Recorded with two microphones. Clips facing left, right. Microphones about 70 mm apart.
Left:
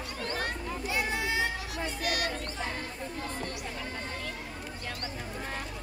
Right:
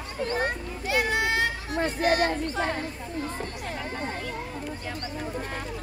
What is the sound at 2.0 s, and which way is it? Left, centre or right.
Speech, right.